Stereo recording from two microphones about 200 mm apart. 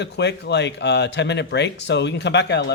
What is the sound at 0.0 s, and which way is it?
Mantra, 55° left (ahead or behind).